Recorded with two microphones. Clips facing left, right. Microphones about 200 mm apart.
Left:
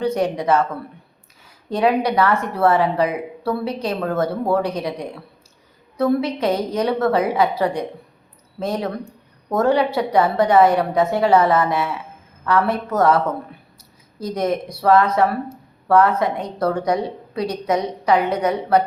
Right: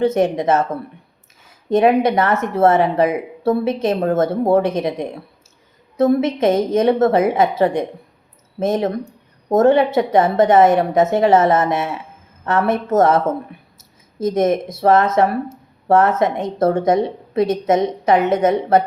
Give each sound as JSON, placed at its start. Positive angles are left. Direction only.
{"t": 0.0, "sound": "a woman's voice", "side_deg": -20}
{"t": 1.7, "sound": "a woman's voice", "side_deg": -25}
{"t": 13.7, "sound": "a sound", "side_deg": -25}
{"t": 14.7, "sound": "a woman's voice", "side_deg": -25}